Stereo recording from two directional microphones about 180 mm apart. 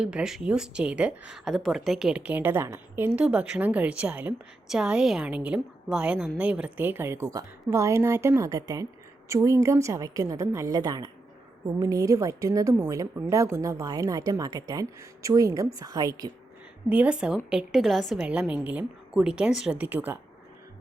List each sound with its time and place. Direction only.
0.0 s a woman's voice: 5° right (ahead or behind)
16.9 s a woman's voice: 5° right (ahead or behind)